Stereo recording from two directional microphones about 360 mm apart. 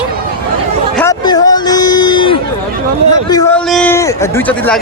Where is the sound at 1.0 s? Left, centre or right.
Centre.